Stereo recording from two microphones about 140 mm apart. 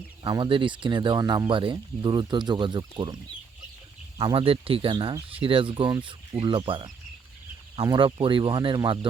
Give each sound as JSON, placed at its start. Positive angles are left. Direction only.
{"t": 0.2, "sound": "speech", "side_deg": -35}
{"t": 4.2, "sound": "speech", "side_deg": -40}